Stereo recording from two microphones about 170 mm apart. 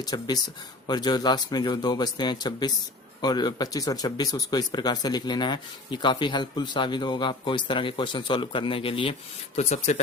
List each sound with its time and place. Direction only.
0.0 s speech: 20° left (ahead or behind); by 10.0 s 45° left (ahead or behind)